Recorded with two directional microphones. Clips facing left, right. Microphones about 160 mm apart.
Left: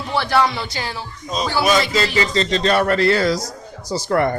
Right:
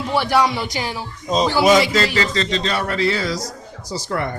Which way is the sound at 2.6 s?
55° left (ahead or behind).